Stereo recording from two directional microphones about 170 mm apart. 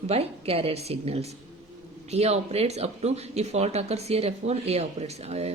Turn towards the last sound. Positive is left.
turn(degrees=-40)  # may be behind; listen again after turning